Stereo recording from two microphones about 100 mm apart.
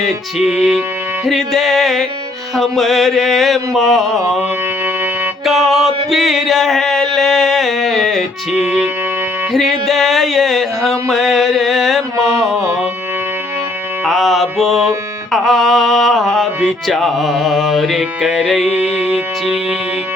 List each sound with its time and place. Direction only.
0.0 s music: 5° right (ahead or behind)
5.5 s music: centre (ahead or behind)
9.5 s music: centre (ahead or behind)
12.1 s music: 35° right (ahead or behind)
12.4 s music: centre (ahead or behind)
14.0 s music: centre (ahead or behind)